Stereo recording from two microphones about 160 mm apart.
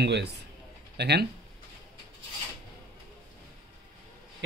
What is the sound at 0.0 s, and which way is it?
Speech, 90° right.